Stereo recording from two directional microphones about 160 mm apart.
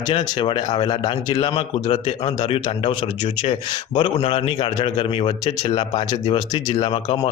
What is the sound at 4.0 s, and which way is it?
Speech, 35° left (ahead or behind).